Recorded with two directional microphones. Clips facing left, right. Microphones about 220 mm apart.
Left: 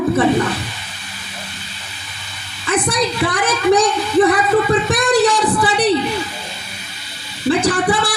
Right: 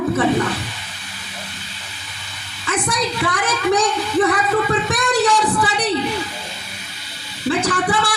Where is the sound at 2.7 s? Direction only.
35° left (ahead or behind).